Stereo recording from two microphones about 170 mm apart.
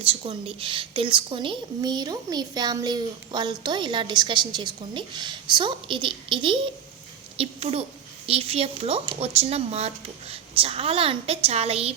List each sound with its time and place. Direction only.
0.0 s a child's voice: 35° right (ahead or behind)